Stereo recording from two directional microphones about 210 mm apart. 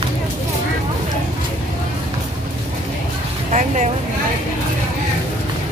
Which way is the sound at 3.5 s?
35° right (ahead or behind).